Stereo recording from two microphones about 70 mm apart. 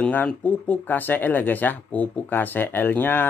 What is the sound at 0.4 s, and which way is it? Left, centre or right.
Speech, left.